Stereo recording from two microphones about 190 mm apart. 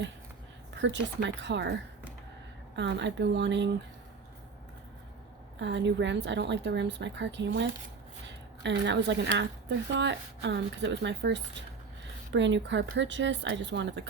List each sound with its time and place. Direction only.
0.8 s a woman's voice: 70° right (ahead or behind)
2.7 s a woman's voice: 70° right (ahead or behind)
5.5 s a woman's voice: 70° right (ahead or behind)